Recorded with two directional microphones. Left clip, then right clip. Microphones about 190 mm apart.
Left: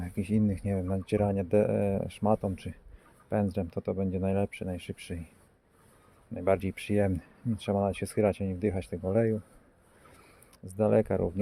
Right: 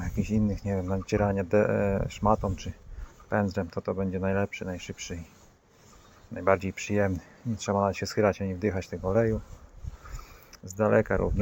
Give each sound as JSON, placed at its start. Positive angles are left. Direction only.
{"t": 0.0, "sound": "speech", "side_deg": 40}
{"t": 6.3, "sound": "speech", "side_deg": 40}
{"t": 10.8, "sound": "speech", "side_deg": 40}